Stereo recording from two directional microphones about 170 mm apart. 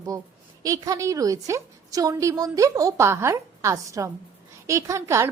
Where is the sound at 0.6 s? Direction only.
20° right (ahead or behind).